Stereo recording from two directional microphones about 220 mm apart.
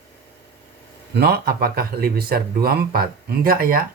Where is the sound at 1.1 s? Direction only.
45° right (ahead or behind).